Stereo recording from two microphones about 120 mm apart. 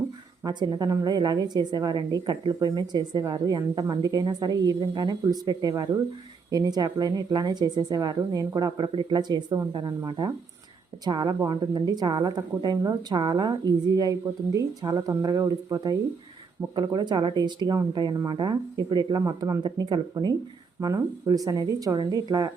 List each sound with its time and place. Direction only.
0.4 s a woman's voice: 35° right (ahead or behind)